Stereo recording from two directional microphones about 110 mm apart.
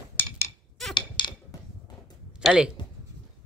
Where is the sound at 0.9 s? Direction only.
45° left (ahead or behind).